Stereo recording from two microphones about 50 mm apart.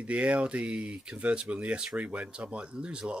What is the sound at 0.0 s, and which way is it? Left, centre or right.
Speech, right.